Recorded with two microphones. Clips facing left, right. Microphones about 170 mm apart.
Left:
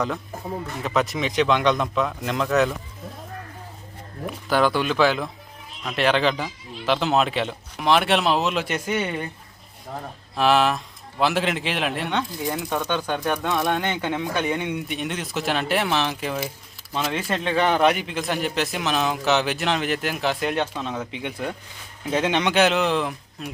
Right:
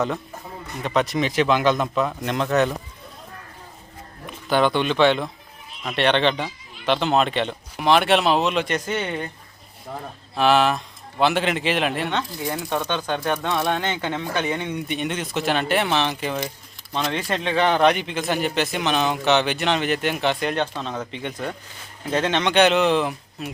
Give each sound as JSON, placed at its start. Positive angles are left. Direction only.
{"t": 0.8, "sound": "a man's voice", "side_deg": 0}
{"t": 4.4, "sound": "a man's voice", "side_deg": 0}
{"t": 10.3, "sound": "a man's voice", "side_deg": 0}